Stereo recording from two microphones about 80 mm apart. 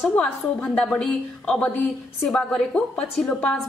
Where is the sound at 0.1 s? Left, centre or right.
Centre.